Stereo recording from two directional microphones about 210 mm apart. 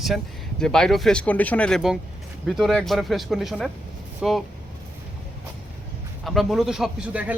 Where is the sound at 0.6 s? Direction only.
Centre (ahead or behind).